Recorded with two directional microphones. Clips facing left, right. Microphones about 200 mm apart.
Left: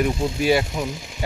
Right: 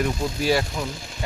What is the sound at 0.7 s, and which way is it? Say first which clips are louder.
Speech: left 3 dB; 20° left (ahead or behind).